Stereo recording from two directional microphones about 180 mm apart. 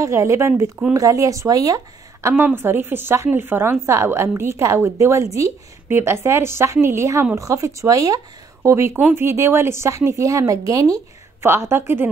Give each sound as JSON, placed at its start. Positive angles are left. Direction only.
{"t": 0.0, "sound": "a woman's voice", "side_deg": -15}